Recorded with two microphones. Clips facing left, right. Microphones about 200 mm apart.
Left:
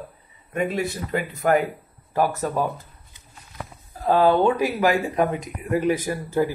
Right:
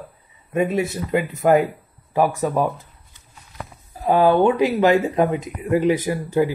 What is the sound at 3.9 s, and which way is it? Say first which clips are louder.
Speech: right 2 dB; 10° right (ahead or behind).